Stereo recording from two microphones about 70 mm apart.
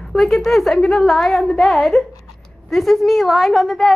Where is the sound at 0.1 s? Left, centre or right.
Centre.